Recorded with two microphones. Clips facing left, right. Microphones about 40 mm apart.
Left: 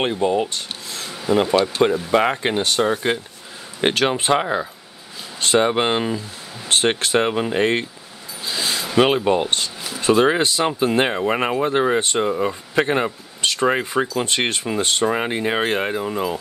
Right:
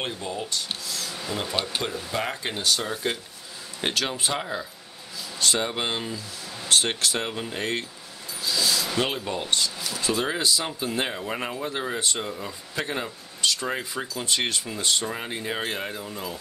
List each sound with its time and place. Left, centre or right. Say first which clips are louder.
0.0 s speech: left 12 dB; left
8.5 s a sound: left 1 dB; left
8.9 s speech: left 11 dB; left
10.0 s speech: left 10 dB; left